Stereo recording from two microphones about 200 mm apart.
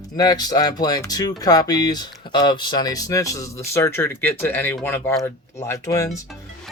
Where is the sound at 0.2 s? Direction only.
20° left (ahead or behind).